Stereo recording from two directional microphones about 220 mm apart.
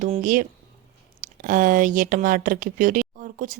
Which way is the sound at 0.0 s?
35° right (ahead or behind).